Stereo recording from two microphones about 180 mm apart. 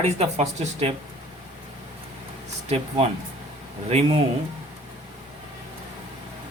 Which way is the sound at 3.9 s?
35° right (ahead or behind).